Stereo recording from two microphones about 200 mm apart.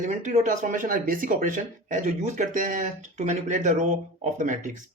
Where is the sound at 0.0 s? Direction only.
35° right (ahead or behind).